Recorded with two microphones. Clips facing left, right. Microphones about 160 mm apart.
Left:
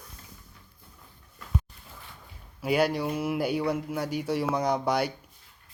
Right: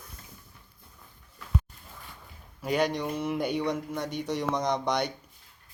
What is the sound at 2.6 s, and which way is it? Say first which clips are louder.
Speech: left 2 dB; 5° left (ahead or behind).